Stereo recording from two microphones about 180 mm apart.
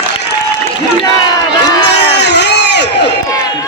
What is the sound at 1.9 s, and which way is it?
Crowd, 70° left (ahead or behind).